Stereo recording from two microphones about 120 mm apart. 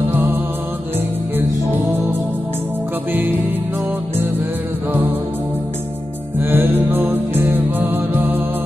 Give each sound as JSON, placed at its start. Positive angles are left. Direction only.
{"t": 3.1, "sound": "music", "side_deg": -15}
{"t": 6.4, "sound": "music", "side_deg": -20}